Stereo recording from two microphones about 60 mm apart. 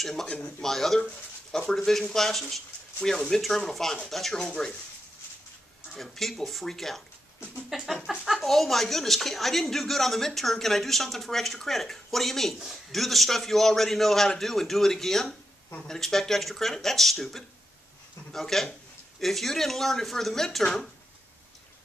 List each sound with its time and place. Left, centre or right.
0.0 s speech: centre
0.3 s speech: centre
0.7 s speech: centre
5.9 s speech: centre